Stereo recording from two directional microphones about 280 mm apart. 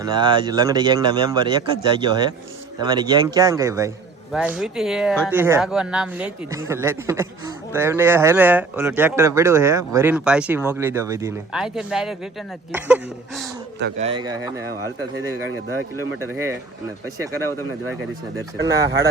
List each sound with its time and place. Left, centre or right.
0.0 s speech: centre
14.0 s speech: centre
16.2 s speech: centre
18.5 s speech: right